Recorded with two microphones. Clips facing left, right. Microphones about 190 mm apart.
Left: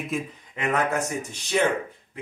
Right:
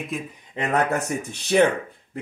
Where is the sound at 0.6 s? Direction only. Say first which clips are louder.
Right 1 dB; 30° right (ahead or behind).